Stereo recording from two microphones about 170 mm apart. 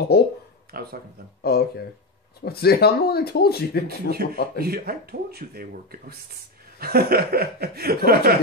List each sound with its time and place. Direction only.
0.1 s speech: 70° left (ahead or behind)
0.7 s speech: 65° right (ahead or behind)
1.4 s speech: 65° left (ahead or behind)
4.1 s speech: 60° right (ahead or behind)